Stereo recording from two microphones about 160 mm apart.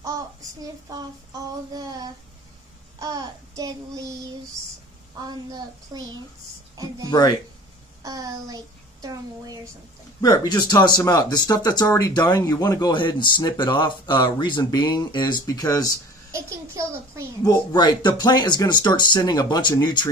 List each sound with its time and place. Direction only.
0.0 s child singing: 20° right (ahead or behind)
5.2 s speech: 25° right (ahead or behind)
7.1 s speech: 20° left (ahead or behind)
8.0 s speech: 20° right (ahead or behind)
10.2 s speech: 25° left (ahead or behind)
16.3 s a child's voice: 20° right (ahead or behind)
17.5 s speech: 25° left (ahead or behind)